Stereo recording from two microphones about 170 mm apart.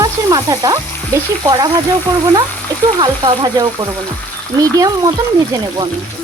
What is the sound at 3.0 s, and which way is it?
Frying, 25° right (ahead or behind).